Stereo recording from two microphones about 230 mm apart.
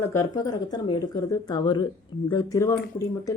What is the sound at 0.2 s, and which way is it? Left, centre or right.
Speech, centre.